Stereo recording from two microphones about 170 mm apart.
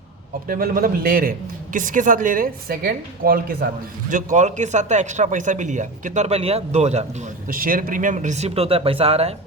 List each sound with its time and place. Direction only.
0.4 s a man's voice: 55° right (ahead or behind)
4.1 s speech: 50° right (ahead or behind)
7.5 s speech: 55° right (ahead or behind); by 9.3 s 35° right (ahead or behind)